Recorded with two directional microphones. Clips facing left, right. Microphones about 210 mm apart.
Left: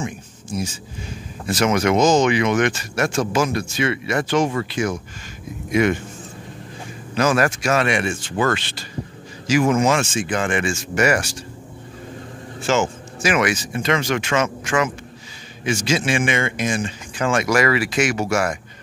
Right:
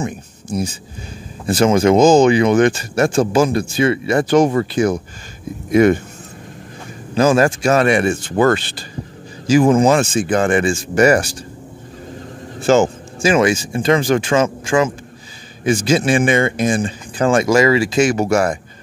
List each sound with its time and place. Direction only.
1.4 s speech: 30° right (ahead or behind)
7.2 s speech: 30° right (ahead or behind)
12.5 s speech: 35° right (ahead or behind)